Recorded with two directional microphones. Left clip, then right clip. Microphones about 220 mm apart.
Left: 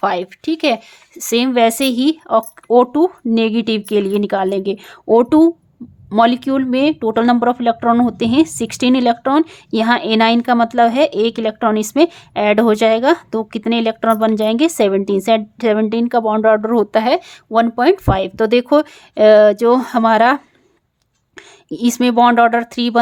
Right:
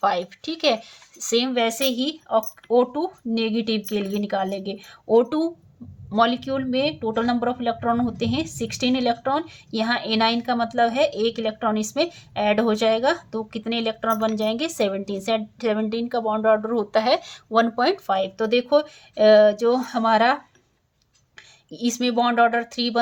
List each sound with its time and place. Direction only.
0.0 s speech: 30° left (ahead or behind)